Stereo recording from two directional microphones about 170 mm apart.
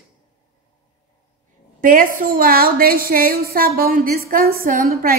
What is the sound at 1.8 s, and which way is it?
A woman's voice, 55° right (ahead or behind).